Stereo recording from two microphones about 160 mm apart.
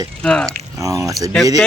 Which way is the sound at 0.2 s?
5° left (ahead or behind).